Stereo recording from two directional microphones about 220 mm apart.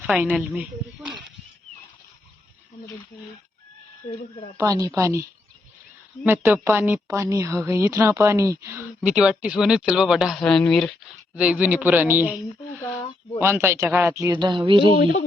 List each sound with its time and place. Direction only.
0.1 s a woman's voice: 5° right (ahead or behind)
4.5 s a woman's voice: 15° right (ahead or behind)
6.2 s a woman's voice: 10° right (ahead or behind)
13.4 s a woman's voice: 10° right (ahead or behind)